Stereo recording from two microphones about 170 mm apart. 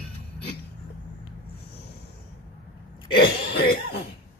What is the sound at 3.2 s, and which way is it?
Throat clearing, 75° left (ahead or behind).